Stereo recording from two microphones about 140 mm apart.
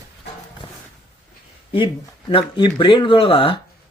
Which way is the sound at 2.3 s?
40° left (ahead or behind).